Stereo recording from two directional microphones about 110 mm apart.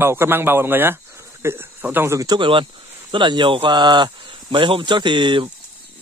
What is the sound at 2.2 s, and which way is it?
Speech, 45° right (ahead or behind).